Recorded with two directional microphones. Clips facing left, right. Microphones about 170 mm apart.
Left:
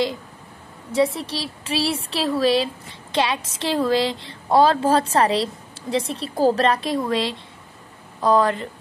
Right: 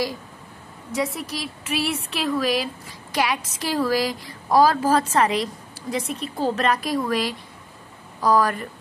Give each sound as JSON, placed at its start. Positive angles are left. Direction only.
{"t": 0.9, "sound": "speech", "side_deg": 30}